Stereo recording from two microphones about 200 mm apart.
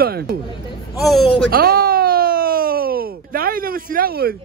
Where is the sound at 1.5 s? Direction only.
50° right (ahead or behind).